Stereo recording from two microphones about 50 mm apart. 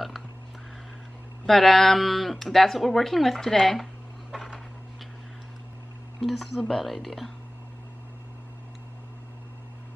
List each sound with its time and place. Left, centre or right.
1.4 s speech: centre
4.3 s a sound: centre
6.2 s speech: centre